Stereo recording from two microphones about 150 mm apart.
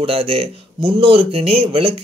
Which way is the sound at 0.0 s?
40° right (ahead or behind).